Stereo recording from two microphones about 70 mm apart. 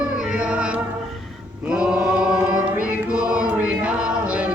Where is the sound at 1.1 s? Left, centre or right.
Centre.